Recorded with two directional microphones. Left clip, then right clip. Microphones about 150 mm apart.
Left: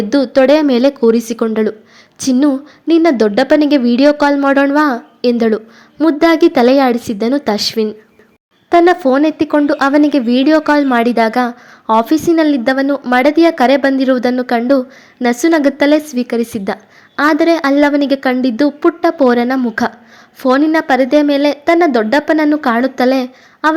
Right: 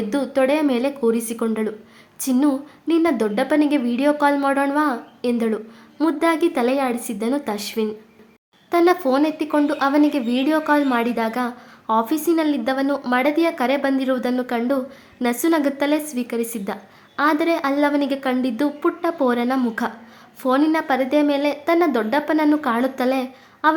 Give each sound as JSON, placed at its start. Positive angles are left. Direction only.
{"t": 0.1, "sound": "a woman's voice", "side_deg": 30}